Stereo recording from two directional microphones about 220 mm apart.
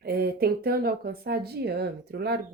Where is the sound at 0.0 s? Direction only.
45° right (ahead or behind).